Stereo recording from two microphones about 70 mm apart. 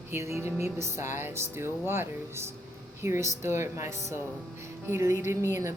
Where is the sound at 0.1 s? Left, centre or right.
Right.